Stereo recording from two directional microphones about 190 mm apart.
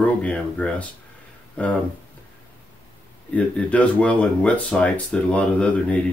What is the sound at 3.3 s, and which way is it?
Speech, 5° left (ahead or behind).